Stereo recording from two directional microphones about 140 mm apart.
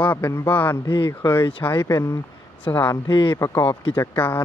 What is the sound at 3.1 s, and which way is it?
Speech, 35° left (ahead or behind).